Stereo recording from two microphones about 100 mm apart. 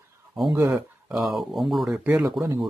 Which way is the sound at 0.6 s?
5° right (ahead or behind).